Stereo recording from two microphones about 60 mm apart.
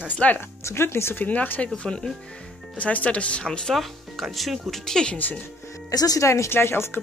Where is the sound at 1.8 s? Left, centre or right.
Centre.